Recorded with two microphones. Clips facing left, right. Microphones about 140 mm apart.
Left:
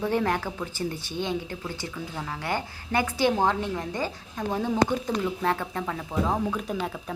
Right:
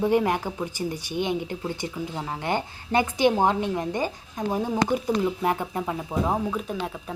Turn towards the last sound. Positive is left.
turn(degrees=-5)  # may be behind; listen again after turning